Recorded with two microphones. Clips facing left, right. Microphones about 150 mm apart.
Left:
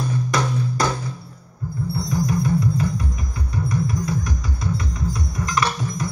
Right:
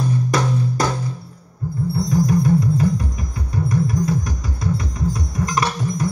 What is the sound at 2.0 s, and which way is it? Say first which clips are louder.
Music: right 5 dB; 40° right (ahead or behind).